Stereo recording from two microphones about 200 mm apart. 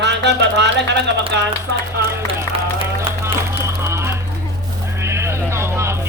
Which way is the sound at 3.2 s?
15° right (ahead or behind).